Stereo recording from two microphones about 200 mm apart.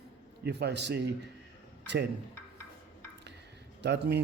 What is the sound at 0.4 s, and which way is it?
Speech, 55° right (ahead or behind).